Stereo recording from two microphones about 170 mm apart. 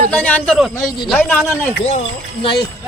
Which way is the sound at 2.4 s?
30° left (ahead or behind).